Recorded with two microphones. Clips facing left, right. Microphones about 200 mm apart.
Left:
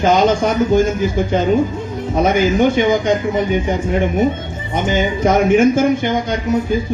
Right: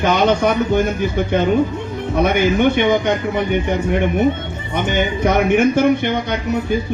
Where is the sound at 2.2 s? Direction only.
60° right (ahead or behind).